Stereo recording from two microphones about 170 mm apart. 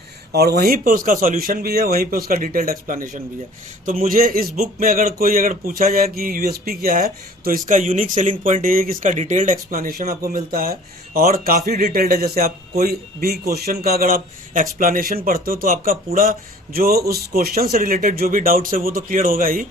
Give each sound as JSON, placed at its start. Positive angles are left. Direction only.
{"t": 0.3, "sound": "a man's voice", "side_deg": -65}